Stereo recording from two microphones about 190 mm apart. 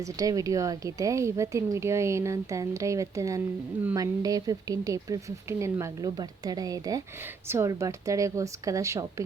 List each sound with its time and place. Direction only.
0.0 s speech: 20° right (ahead or behind)